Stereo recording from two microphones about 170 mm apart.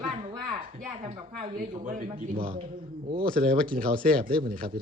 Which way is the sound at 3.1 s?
60° right (ahead or behind).